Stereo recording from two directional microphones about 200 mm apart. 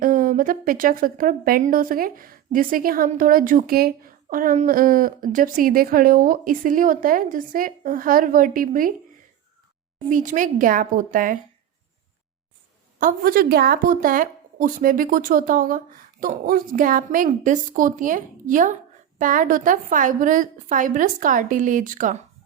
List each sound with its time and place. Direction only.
0.0 s a woman's voice: 45° right (ahead or behind)
10.1 s a woman's voice: 40° right (ahead or behind)
13.0 s a woman's voice: 45° right (ahead or behind)